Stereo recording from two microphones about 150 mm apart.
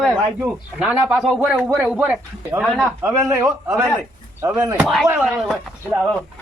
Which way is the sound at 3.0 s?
20° right (ahead or behind).